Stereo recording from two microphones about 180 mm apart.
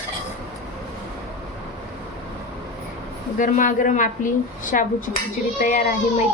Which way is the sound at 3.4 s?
45° left (ahead or behind).